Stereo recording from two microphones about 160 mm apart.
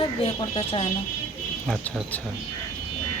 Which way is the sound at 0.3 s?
40° left (ahead or behind).